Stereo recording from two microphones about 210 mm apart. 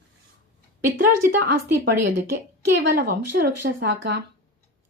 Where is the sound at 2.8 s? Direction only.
45° right (ahead or behind).